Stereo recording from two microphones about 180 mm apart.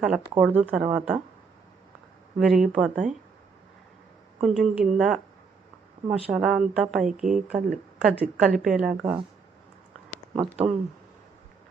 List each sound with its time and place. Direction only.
0.0 s speech: 5° right (ahead or behind)
2.4 s speech: 5° right (ahead or behind)
4.4 s speech: centre (ahead or behind)
10.6 s speech: 30° right (ahead or behind)